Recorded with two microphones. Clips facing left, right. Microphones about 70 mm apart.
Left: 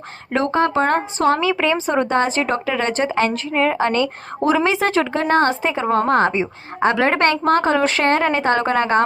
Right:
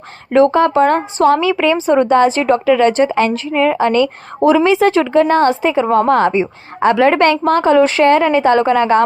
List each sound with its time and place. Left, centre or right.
0.5 s a woman's voice: left